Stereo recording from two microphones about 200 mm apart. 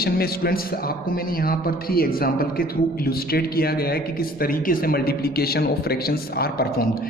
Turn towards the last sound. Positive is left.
turn(degrees=45)  # may be behind; listen again after turning